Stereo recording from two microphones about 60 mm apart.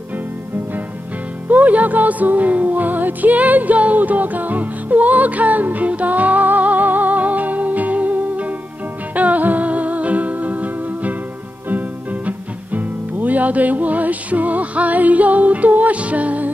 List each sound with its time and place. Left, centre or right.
1.5 s music: right